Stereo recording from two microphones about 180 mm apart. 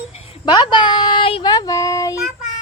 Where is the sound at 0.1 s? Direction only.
35° left (ahead or behind).